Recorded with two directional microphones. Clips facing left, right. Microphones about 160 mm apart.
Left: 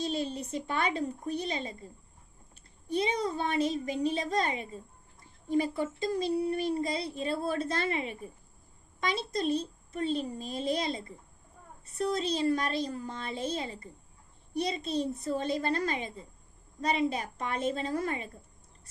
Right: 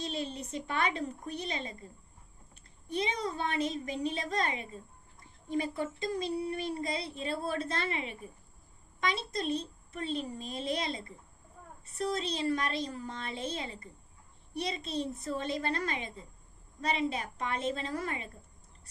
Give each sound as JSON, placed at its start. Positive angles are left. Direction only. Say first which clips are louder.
{"t": 0.0, "sound": "a child's voice", "louder": "left 4 dB", "side_deg": 35}
{"t": 2.9, "sound": "a child's voice", "louder": "left 4 dB", "side_deg": 35}